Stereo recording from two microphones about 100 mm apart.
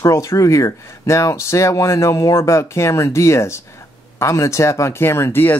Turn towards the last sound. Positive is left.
turn(degrees=25)  # may be behind; listen again after turning